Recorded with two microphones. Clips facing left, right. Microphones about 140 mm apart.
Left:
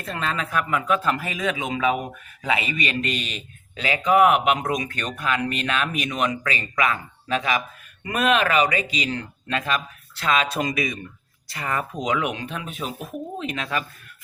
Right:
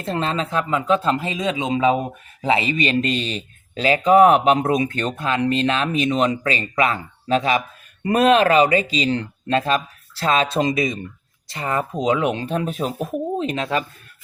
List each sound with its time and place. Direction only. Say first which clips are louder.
0.0 s speech: right 5 dB; 30° right (ahead or behind)